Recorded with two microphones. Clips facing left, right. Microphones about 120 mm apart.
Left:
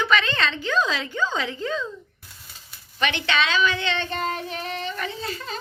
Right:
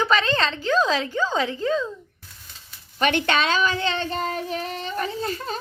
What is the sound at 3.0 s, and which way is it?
Speech, 45° right (ahead or behind).